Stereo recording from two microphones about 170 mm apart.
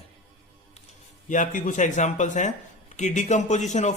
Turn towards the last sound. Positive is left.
turn(degrees=45)  # may be behind; listen again after turning